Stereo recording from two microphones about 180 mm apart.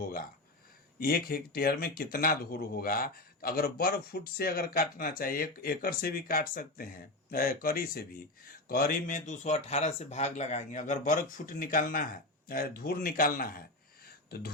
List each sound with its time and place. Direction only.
0.9 s speech: 55° left (ahead or behind)